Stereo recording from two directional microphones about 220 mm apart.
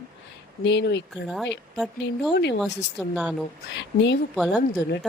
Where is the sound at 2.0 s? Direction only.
50° left (ahead or behind).